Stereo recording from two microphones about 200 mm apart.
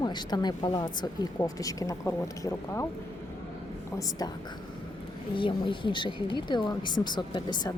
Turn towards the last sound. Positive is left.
turn(degrees=20)  # may be behind; listen again after turning